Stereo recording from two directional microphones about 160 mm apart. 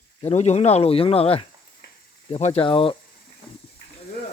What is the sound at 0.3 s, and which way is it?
Speech, 45° left (ahead or behind).